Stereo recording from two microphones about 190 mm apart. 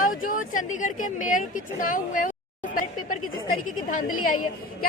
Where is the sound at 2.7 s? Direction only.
45° left (ahead or behind).